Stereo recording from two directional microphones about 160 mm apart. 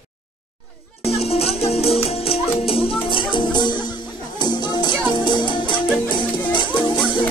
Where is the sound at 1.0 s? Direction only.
40° left (ahead or behind).